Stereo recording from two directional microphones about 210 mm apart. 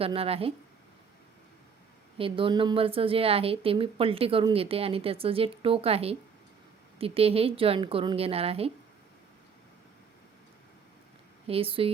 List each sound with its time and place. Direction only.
0.0 s a woman's voice: 25° right (ahead or behind)
2.1 s a woman's voice: 25° right (ahead or behind)
11.4 s a woman's voice: 25° right (ahead or behind)